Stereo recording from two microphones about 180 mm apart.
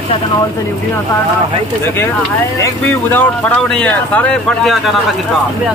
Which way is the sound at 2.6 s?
10° left (ahead or behind).